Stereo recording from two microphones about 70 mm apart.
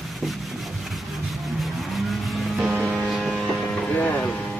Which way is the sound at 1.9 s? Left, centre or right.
Centre.